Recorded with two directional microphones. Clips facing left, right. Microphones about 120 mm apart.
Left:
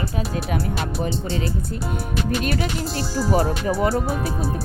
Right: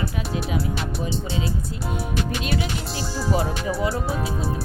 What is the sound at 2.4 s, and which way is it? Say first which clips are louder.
Music: left 2 dB; 50° left (ahead or behind).